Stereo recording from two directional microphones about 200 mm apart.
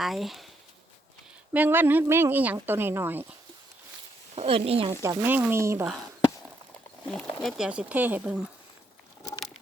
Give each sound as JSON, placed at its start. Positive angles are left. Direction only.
{"t": 0.0, "sound": "speech", "side_deg": 0}
{"t": 1.5, "sound": "a woman's voice", "side_deg": -10}
{"t": 4.4, "sound": "speech", "side_deg": -30}
{"t": 5.0, "sound": "a woman's voice", "side_deg": -10}
{"t": 7.1, "sound": "speech", "side_deg": 0}